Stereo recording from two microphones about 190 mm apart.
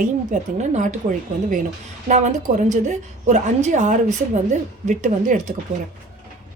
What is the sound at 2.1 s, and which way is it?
A woman's voice, 40° right (ahead or behind).